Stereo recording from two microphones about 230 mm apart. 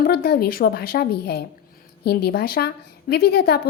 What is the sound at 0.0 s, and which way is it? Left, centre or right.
A woman's voice, left.